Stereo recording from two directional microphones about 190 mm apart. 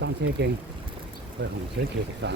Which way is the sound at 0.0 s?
60° right (ahead or behind).